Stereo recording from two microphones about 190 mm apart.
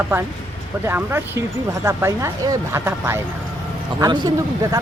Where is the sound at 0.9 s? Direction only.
10° right (ahead or behind).